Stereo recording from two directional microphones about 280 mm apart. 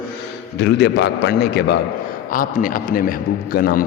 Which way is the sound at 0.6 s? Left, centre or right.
Left.